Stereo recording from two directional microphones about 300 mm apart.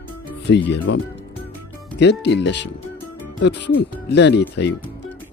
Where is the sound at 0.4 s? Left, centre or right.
Left.